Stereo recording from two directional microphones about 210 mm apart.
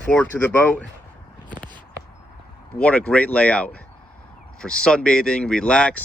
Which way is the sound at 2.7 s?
5° left (ahead or behind).